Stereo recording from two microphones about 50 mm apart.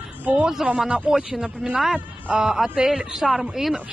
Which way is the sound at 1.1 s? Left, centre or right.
Centre.